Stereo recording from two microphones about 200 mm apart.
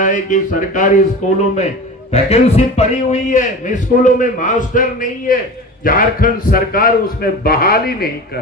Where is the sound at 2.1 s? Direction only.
30° left (ahead or behind); by 8.1 s 50° left (ahead or behind).